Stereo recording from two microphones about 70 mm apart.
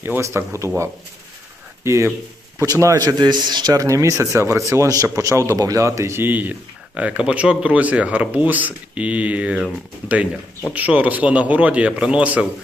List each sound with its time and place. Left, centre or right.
0.2 s speech: right
1.8 s speech: right
3.0 s a man's voice: right
3.8 s a man's voice: right; by 9.6 s centre
10.7 s a man's voice: right